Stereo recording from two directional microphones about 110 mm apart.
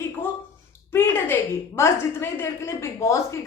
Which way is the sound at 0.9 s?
25° left (ahead or behind).